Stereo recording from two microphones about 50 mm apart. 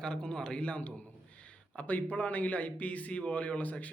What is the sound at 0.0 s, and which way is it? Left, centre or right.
A man's voice, centre.